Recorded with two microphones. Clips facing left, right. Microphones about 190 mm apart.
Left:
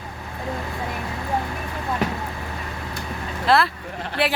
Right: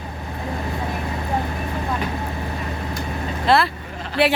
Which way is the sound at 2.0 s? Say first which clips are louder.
Left 2 dB; 85° left.